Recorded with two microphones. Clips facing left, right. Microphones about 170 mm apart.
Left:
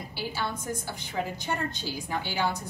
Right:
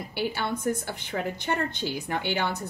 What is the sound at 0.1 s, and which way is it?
A woman's voice, 60° right (ahead or behind).